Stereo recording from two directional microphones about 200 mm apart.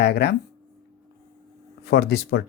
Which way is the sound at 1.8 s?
55° left (ahead or behind).